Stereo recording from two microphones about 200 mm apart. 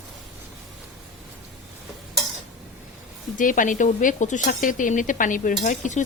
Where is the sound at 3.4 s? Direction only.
40° left (ahead or behind).